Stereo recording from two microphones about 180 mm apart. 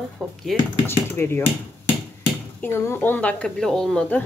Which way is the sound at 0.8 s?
15° left (ahead or behind).